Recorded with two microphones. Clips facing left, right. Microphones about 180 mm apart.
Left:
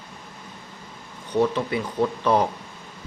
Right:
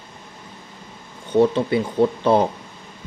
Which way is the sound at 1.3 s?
30° right (ahead or behind).